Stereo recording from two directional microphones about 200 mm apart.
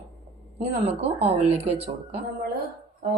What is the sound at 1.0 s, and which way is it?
Speech, 30° right (ahead or behind).